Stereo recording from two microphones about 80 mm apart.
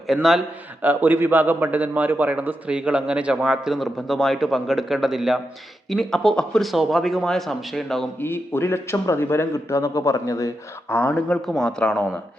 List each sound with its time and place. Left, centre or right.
0.1 s speech: centre
0.8 s a man's voice: right; by 8.0 s centre
8.2 s speech: left
10.8 s speech: left
11.4 s speech: centre